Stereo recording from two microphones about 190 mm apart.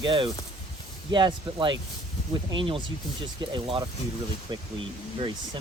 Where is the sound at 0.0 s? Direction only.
25° right (ahead or behind).